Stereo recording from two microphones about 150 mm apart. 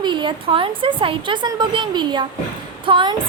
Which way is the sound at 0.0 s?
30° right (ahead or behind).